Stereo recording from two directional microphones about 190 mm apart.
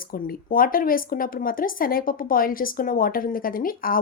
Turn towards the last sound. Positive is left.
turn(degrees=50)  # may be behind; listen again after turning